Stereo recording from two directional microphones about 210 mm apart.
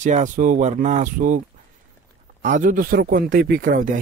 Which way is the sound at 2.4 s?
40° right (ahead or behind).